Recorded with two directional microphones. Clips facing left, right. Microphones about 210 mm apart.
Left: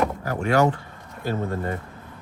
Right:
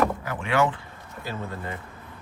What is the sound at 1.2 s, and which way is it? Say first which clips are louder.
Speech: left 7 dB; 45° left (ahead or behind).